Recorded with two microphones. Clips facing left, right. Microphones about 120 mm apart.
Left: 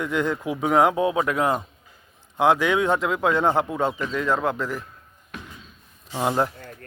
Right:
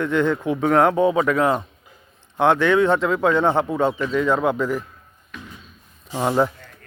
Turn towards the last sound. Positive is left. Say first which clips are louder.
# right 3 dB
turn(degrees=5)  # may be behind; listen again after turning